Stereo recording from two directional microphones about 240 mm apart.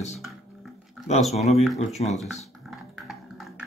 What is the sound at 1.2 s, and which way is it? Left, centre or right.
Speech, centre.